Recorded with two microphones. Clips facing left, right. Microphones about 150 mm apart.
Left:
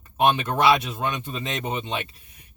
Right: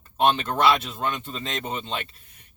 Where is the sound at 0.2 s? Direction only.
10° left (ahead or behind).